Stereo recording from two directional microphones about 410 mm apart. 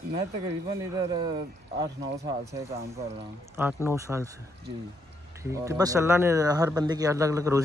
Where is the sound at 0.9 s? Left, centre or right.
Centre.